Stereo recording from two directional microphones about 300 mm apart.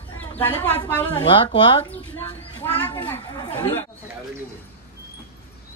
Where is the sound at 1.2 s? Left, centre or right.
Centre.